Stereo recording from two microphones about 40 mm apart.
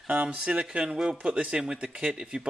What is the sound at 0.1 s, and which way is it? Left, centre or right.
Speech, right.